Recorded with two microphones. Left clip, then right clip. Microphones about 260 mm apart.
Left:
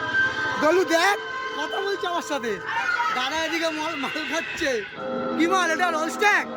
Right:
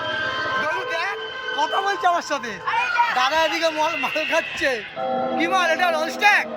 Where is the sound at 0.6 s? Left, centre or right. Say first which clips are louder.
Left 5 dB; left.